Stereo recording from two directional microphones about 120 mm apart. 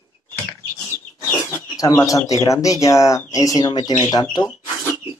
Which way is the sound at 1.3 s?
30° left (ahead or behind).